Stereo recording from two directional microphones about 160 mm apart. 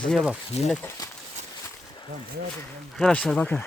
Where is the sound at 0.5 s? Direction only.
40° left (ahead or behind).